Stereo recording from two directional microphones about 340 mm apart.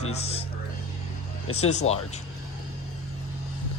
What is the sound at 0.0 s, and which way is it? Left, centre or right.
Music, centre.